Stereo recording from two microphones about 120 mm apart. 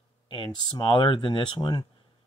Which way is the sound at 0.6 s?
35° left (ahead or behind).